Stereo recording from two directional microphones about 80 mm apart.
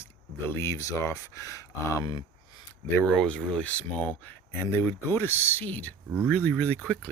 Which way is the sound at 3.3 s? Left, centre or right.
Centre.